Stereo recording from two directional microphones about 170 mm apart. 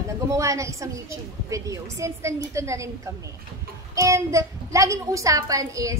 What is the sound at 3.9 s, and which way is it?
A child's voice, 20° right (ahead or behind).